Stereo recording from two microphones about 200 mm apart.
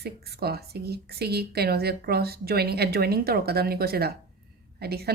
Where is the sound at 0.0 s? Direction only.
50° right (ahead or behind).